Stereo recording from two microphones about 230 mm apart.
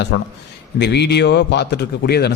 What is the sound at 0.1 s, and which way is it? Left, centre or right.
A man's voice, left.